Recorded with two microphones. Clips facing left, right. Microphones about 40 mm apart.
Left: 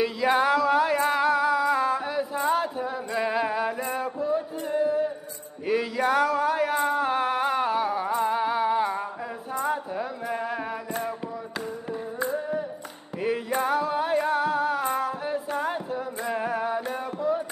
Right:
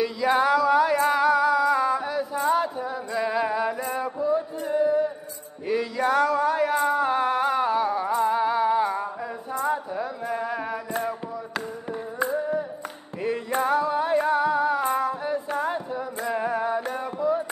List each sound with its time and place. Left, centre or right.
0.3 s music: centre
5.7 s a sound: centre
9.5 s music: centre
13.5 s music: centre